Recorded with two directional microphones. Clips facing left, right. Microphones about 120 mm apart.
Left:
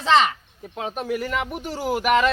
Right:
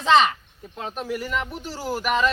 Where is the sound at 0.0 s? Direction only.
20° right (ahead or behind).